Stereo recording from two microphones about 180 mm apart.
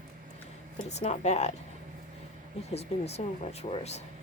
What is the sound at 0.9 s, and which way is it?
Speech, 40° left (ahead or behind).